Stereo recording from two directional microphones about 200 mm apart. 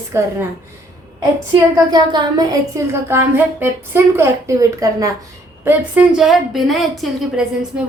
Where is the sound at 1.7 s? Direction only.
20° right (ahead or behind).